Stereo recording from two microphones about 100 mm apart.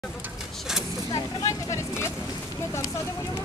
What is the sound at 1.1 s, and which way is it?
Speech, 30° left (ahead or behind).